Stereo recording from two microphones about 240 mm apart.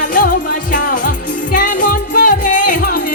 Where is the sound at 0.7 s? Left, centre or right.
Left.